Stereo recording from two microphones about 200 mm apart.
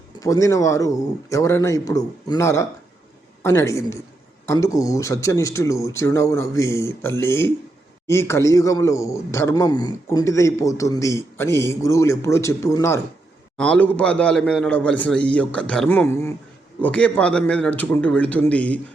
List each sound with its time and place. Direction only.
0.2 s a man's voice: 15° left (ahead or behind)